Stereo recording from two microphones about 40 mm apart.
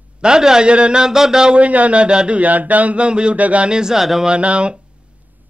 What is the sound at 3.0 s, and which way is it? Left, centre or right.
Speech, right.